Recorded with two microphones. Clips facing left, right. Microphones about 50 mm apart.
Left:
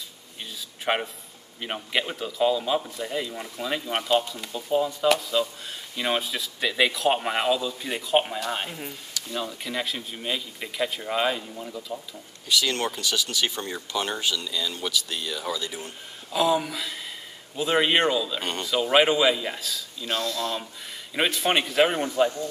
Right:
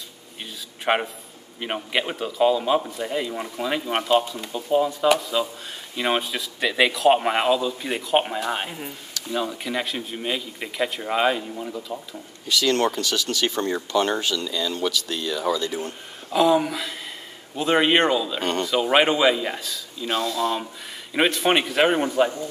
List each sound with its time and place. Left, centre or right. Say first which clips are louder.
0.8 s a man's voice: right 4 dB; centre
7.1 s speech: right 5 dB; centre
12.4 s speech: right 4 dB; centre
13.5 s speech: right 8 dB; right
14.9 s speech: right 3 dB; centre
15.5 s a man's voice: right 7 dB; centre
20.1 s speech: right 4 dB; centre